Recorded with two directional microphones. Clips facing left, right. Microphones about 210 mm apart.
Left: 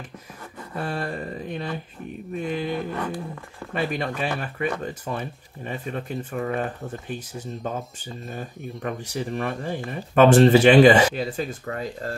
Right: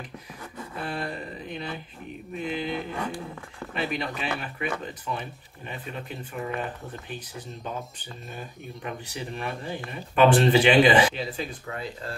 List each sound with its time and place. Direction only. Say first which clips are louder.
0.8 s speech: left 4 dB; 45° left (ahead or behind)
2.9 s speech: left 3 dB; 10° right (ahead or behind)
3.7 s speech: left 4 dB; 45° left (ahead or behind)
8.8 s speech: left 6 dB; 45° left (ahead or behind)